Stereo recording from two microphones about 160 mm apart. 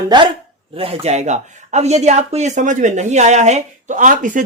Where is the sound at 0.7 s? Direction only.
35° right (ahead or behind).